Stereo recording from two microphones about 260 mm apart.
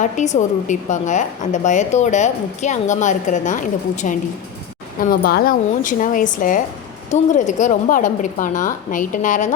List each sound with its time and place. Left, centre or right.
0.0 s a woman's voice: left